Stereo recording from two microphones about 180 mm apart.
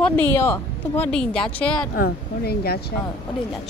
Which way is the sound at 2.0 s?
60° left (ahead or behind).